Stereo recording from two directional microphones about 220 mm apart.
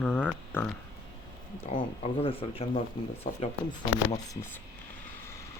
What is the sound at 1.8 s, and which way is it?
Speech, 25° left (ahead or behind).